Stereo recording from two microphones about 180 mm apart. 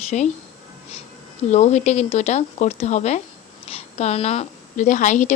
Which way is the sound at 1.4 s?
35° left (ahead or behind).